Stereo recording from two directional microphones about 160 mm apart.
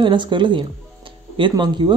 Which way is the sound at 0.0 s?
30° right (ahead or behind).